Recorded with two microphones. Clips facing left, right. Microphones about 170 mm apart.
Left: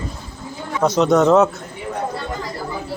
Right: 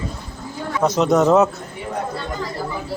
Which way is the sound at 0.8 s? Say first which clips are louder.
Left 1 dB; centre (ahead or behind).